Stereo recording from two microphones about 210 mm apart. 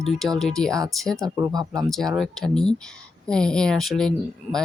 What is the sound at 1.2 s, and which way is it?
Speech, 15° right (ahead or behind).